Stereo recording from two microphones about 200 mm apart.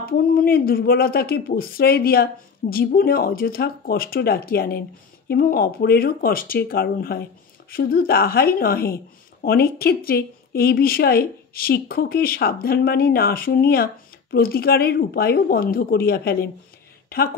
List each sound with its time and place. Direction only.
0.0 s a woman's voice: 50° left (ahead or behind)